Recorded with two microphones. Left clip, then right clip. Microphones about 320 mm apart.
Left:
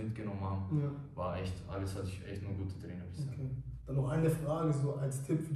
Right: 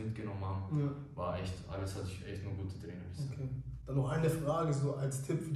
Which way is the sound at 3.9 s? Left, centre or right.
Centre.